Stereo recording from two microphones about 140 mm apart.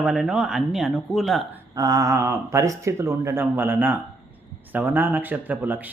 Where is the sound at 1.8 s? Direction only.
25° right (ahead or behind).